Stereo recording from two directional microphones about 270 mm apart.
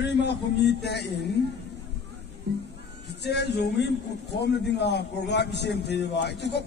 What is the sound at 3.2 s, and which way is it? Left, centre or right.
A man's voice, left.